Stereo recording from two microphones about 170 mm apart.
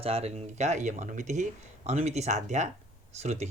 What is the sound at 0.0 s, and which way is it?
Speech, 35° right (ahead or behind).